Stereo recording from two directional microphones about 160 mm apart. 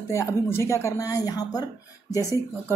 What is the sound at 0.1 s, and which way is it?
Speech, 15° left (ahead or behind).